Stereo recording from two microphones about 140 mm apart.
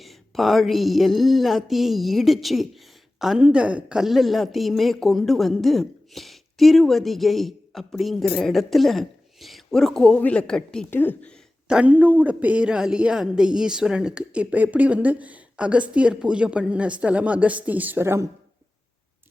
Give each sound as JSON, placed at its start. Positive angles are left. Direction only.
{"t": 0.0, "sound": "speech", "side_deg": 0}
{"t": 11.7, "sound": "speech", "side_deg": -10}